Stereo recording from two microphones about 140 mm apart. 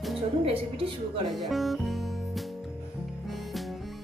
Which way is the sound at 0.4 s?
40° right (ahead or behind).